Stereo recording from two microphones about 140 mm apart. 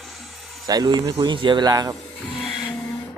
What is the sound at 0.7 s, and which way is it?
Speech, 30° right (ahead or behind).